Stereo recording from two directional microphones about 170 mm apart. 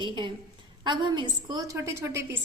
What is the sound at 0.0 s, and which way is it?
A woman's voice, 30° right (ahead or behind).